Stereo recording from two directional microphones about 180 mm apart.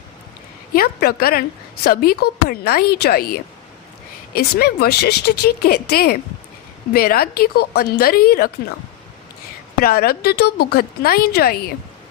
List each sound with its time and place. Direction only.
0.7 s a woman's voice: 55° left (ahead or behind)
9.8 s a woman's voice: 55° left (ahead or behind)